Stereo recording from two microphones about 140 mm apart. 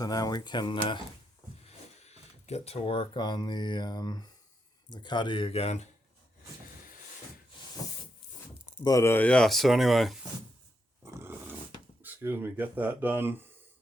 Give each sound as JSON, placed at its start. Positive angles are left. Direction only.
{"t": 0.0, "sound": "speech", "side_deg": 30}
{"t": 2.0, "sound": "speech", "side_deg": 50}
{"t": 8.8, "sound": "speech", "side_deg": 25}
{"t": 11.0, "sound": "dog", "side_deg": -20}
{"t": 12.0, "sound": "speech", "side_deg": -15}